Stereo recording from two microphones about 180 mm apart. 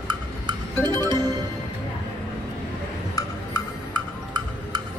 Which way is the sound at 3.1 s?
20° left (ahead or behind).